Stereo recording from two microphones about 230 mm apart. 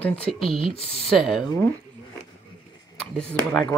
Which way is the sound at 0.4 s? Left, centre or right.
Left.